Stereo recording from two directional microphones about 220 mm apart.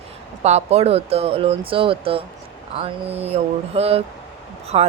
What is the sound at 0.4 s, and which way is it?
Speech, 30° right (ahead or behind).